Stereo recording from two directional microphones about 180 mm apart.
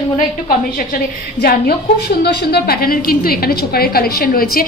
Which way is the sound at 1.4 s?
60° left (ahead or behind).